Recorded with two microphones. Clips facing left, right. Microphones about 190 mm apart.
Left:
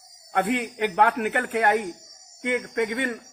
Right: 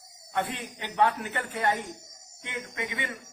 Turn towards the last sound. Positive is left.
turn(degrees=55)  # may be behind; listen again after turning